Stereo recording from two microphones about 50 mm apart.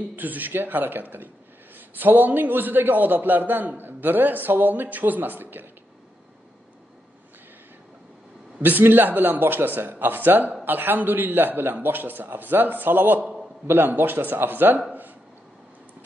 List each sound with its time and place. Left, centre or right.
0.1 s a man's voice: right
8.5 s a man's voice: right
13.2 s a sound: centre
13.7 s speech: right